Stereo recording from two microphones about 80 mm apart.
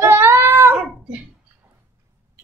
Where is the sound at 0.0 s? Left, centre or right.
Right.